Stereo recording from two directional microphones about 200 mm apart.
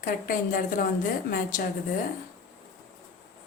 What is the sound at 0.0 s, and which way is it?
A woman's voice, 45° left (ahead or behind).